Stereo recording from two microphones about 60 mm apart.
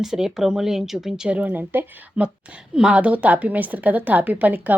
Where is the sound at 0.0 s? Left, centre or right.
Centre.